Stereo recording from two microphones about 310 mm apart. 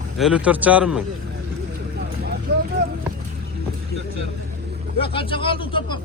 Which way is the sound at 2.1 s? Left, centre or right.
Right.